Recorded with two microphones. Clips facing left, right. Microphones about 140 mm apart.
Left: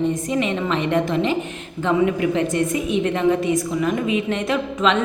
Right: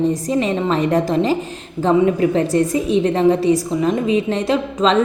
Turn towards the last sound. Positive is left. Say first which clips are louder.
# right 4 dB
turn(degrees=-35)  # may be behind; listen again after turning